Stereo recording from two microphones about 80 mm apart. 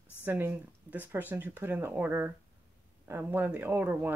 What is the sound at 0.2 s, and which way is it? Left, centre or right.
Speech, right.